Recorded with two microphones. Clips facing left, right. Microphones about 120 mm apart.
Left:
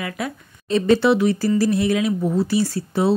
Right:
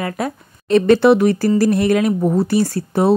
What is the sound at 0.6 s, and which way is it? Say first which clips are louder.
Speech: right 5 dB; 65° right (ahead or behind).